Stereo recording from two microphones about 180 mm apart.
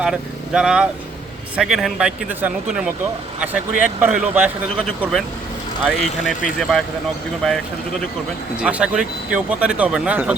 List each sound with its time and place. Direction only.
0.0 s speech: 5° right (ahead or behind)
5.8 s speech: centre (ahead or behind)
8.6 s speech: 5° right (ahead or behind)